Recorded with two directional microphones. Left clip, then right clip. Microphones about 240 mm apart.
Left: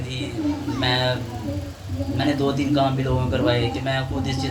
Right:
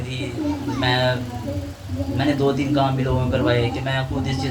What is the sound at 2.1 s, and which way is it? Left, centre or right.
A man's voice, left.